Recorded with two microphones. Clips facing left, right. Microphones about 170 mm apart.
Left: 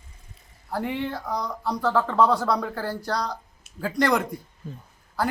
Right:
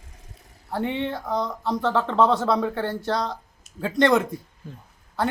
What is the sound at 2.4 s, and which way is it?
Speech, 25° right (ahead or behind).